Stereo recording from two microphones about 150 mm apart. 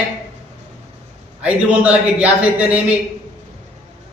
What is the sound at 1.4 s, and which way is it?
A man's voice, 10° right (ahead or behind).